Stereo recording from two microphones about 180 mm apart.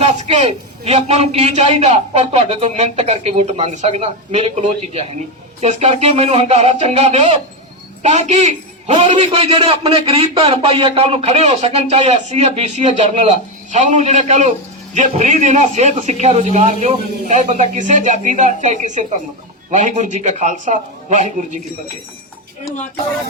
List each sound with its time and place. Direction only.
0.0 s speech: 35° right (ahead or behind)